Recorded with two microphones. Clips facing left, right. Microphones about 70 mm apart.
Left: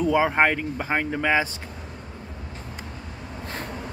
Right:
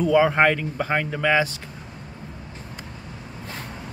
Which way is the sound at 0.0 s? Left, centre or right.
Centre.